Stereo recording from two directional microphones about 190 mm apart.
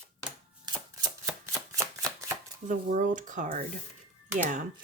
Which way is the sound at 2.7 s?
40° right (ahead or behind).